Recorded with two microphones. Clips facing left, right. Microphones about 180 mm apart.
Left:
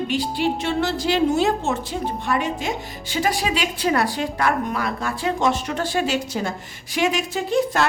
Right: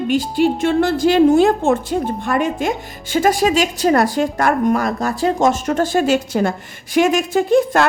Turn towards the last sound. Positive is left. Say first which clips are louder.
# right 6 dB
turn(degrees=-50)  # may be behind; listen again after turning